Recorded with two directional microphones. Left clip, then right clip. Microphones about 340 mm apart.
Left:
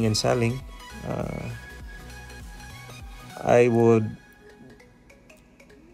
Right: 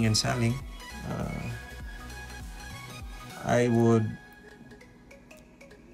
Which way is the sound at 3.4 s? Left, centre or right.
Centre.